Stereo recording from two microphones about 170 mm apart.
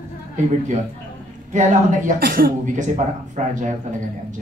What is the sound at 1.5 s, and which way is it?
Speech, 45° right (ahead or behind).